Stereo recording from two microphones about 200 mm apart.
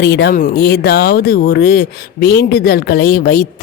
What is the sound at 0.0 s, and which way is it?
Speech, 55° left (ahead or behind).